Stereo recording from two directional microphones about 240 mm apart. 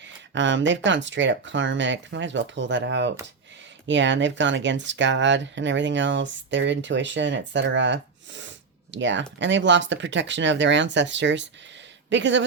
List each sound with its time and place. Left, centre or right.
0.3 s speech: right